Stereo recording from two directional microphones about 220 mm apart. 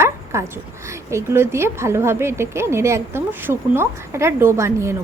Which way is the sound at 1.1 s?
10° right (ahead or behind).